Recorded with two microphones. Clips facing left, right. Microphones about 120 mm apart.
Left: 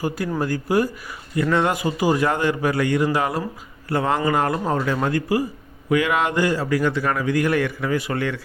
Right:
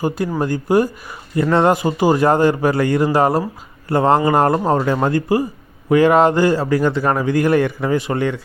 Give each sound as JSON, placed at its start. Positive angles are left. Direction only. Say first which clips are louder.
{"t": 0.3, "sound": "a man's voice", "louder": "right 4 dB", "side_deg": -25}